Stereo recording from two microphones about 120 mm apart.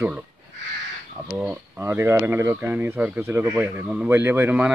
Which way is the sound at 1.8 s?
20° right (ahead or behind).